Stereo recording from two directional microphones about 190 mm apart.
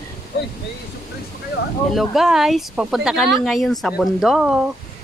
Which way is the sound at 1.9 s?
Centre (ahead or behind).